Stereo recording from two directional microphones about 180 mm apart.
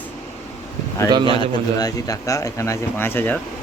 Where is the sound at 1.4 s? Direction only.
20° left (ahead or behind).